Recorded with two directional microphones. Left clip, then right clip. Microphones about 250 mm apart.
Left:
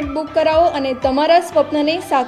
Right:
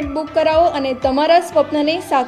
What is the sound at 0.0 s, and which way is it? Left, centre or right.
A woman's voice, centre.